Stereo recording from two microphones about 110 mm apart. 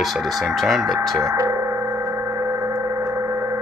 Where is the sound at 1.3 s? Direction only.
30° right (ahead or behind).